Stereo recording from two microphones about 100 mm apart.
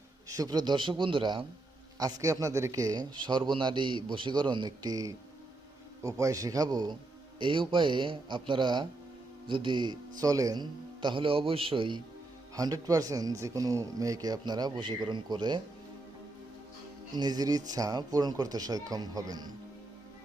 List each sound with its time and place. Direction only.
0.3 s a man's voice: 35° right (ahead or behind); by 1.5 s 50° right (ahead or behind)
2.0 s a man's voice: 40° right (ahead or behind)
7.3 s a man's voice: 55° right (ahead or behind)
12.5 s speech: 40° right (ahead or behind)
17.2 s speech: 40° right (ahead or behind)